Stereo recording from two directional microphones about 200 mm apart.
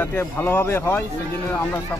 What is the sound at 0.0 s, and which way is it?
Speech, 10° left (ahead or behind).